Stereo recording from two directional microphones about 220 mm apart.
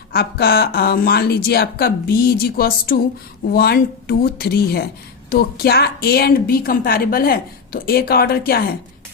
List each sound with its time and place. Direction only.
0.1 s a woman's voice: 45° left (ahead or behind)